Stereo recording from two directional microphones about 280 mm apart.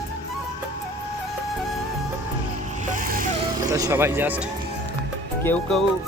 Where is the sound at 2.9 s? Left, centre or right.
Right.